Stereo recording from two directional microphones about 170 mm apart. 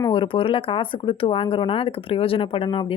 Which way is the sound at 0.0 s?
30° left (ahead or behind).